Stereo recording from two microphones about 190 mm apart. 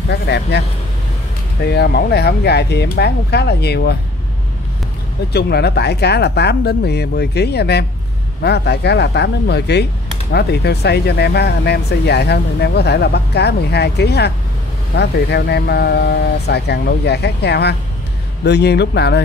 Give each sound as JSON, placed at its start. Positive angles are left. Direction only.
{"t": 0.1, "sound": "speech", "side_deg": 60}
{"t": 5.3, "sound": "speech", "side_deg": 60}